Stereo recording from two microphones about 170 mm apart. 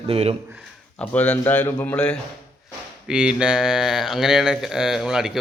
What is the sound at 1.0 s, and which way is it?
A man's voice, 10° left (ahead or behind).